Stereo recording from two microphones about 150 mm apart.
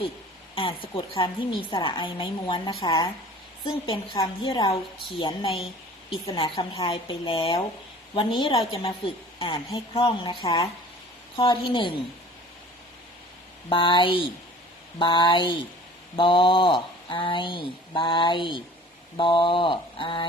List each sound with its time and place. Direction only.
0.5 s a woman's voice: 35° left (ahead or behind)
13.7 s a woman's voice: 35° left (ahead or behind)